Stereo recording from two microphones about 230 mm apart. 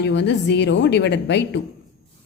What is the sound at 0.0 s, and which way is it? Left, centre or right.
A woman's voice, left.